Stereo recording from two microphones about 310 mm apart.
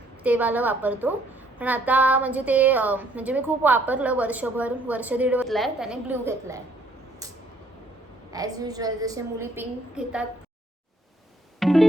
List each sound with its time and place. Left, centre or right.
0.2 s a woman's voice: centre
8.3 s a woman's voice: centre
11.6 s music: centre